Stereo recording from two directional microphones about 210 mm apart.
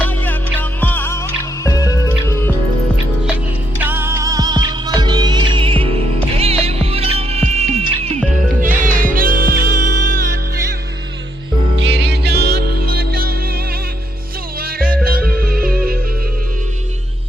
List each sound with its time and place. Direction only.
0.8 s music: 10° left (ahead or behind)
3.8 s music: 10° right (ahead or behind); by 10.8 s 45° right (ahead or behind)
11.8 s music: 55° right (ahead or behind)
15.0 s music: 45° right (ahead or behind)